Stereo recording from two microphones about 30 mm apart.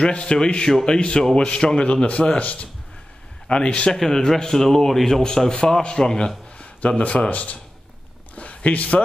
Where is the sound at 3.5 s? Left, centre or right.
Left.